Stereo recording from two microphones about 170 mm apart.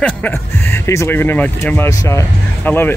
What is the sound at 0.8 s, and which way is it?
Speech, 15° left (ahead or behind).